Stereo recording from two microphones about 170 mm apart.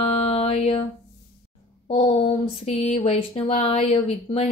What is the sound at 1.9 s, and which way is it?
Speech, 35° left (ahead or behind).